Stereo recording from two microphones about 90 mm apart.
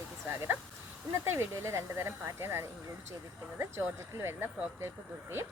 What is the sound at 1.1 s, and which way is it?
Speech, 25° right (ahead or behind).